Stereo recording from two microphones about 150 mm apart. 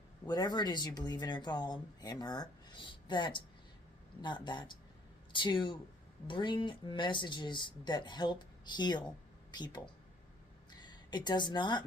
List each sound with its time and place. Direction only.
0.3 s a woman's voice: 25° left (ahead or behind)